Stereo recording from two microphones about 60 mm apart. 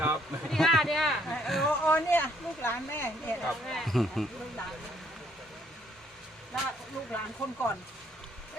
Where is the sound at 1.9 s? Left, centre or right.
Left.